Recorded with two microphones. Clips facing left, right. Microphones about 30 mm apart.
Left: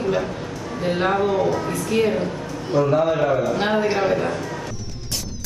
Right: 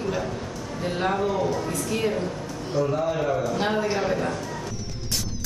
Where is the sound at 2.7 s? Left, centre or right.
Left.